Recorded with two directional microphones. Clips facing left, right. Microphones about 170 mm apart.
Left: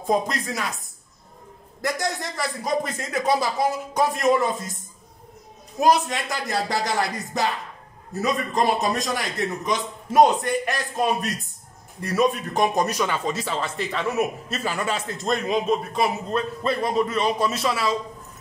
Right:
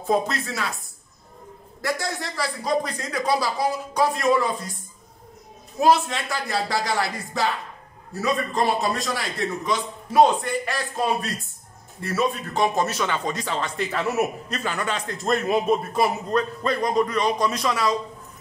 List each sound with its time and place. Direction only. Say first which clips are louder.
0.0 s speech: even; 15° left (ahead or behind)
1.8 s a man's voice: left 1 dB; 20° left (ahead or behind)
5.8 s a man's voice: even; 15° left (ahead or behind)
12.1 s speech: left 3 dB; 15° left (ahead or behind); by 14.2 s 5° right (ahead or behind)
14.5 s a man's voice: left 1 dB; 5° left (ahead or behind)